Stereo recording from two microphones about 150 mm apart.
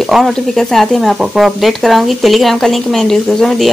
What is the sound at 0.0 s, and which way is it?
A woman's voice, centre (ahead or behind).